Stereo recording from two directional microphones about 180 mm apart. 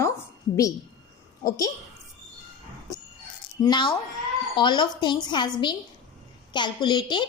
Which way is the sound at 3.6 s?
25° left (ahead or behind).